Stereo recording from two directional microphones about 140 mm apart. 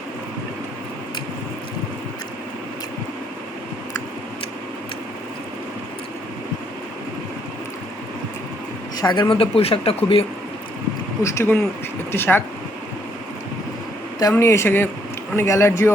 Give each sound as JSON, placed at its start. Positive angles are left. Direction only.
{"t": 9.0, "sound": "speech", "side_deg": 30}
{"t": 11.2, "sound": "speech", "side_deg": 15}
{"t": 14.2, "sound": "speech", "side_deg": 20}